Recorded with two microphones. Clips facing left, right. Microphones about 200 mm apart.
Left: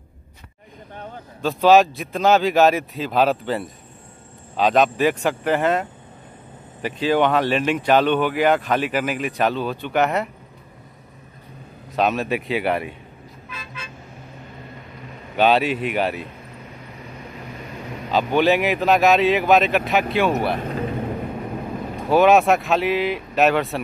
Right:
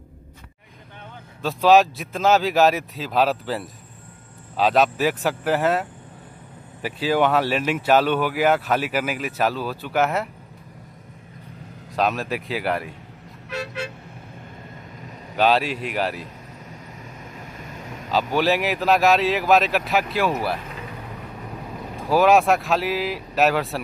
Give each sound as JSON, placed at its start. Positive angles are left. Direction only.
{"t": 1.4, "sound": "speech", "side_deg": 0}
{"t": 11.9, "sound": "speech", "side_deg": 0}
{"t": 13.5, "sound": "toot", "side_deg": -75}
{"t": 15.3, "sound": "speech", "side_deg": 0}
{"t": 18.1, "sound": "speech", "side_deg": 0}
{"t": 21.9, "sound": "speech", "side_deg": 0}